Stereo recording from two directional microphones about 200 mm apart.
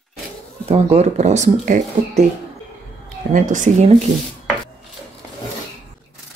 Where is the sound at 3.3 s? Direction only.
40° right (ahead or behind).